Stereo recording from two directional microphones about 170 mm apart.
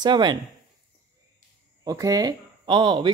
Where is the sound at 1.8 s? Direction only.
20° right (ahead or behind).